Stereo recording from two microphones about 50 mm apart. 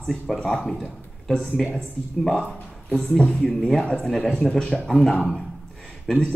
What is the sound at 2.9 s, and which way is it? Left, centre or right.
Speech, centre.